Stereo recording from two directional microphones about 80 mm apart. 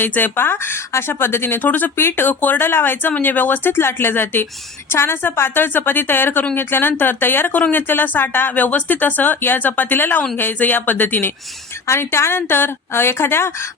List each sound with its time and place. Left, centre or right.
0.0 s speech: left